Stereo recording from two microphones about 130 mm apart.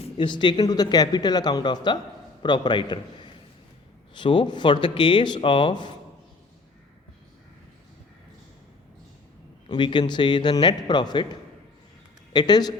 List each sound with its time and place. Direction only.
0.0 s speech: 40° left (ahead or behind)
9.6 s speech: 40° left (ahead or behind)
12.3 s speech: 35° left (ahead or behind)